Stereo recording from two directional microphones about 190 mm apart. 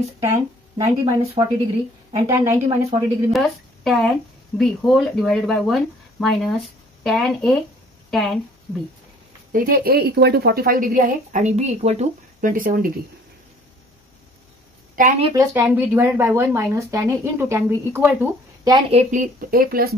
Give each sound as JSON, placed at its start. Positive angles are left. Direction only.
{"t": 0.2, "sound": "speech", "side_deg": -15}
{"t": 3.3, "sound": "a woman's voice", "side_deg": 0}
{"t": 9.5, "sound": "a woman's voice", "side_deg": -50}
{"t": 15.0, "sound": "speech", "side_deg": -40}
{"t": 15.2, "sound": "speech", "side_deg": -15}
{"t": 18.7, "sound": "a woman's voice", "side_deg": -35}